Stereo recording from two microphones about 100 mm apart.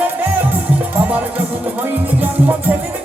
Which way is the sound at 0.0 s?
15° right (ahead or behind).